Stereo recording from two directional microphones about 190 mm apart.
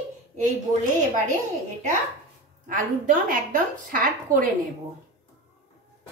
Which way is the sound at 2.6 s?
45° right (ahead or behind).